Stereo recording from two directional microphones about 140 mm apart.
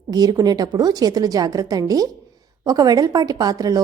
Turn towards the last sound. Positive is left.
turn(degrees=-25)  # may be behind; listen again after turning